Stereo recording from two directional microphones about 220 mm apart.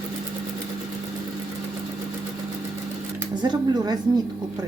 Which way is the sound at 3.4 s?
20° right (ahead or behind).